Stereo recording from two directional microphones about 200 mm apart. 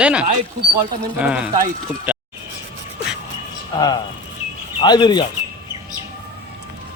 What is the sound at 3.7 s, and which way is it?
Speech, 20° left (ahead or behind).